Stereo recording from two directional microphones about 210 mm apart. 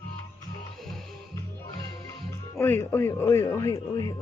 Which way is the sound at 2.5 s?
10° left (ahead or behind).